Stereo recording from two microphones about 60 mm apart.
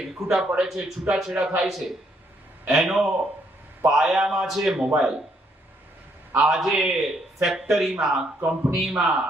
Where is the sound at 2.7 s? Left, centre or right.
Centre.